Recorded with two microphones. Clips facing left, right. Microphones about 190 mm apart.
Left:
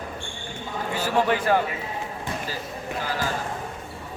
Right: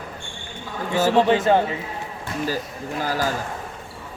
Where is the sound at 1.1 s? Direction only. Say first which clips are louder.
Right 3 dB; 25° right (ahead or behind).